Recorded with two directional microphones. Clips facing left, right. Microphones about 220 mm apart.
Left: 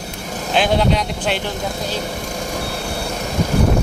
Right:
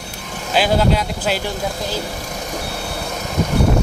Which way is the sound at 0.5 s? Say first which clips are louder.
Even; 5° right (ahead or behind).